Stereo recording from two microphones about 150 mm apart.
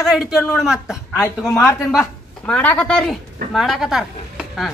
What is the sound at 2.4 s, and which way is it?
A man's voice, 10° left (ahead or behind).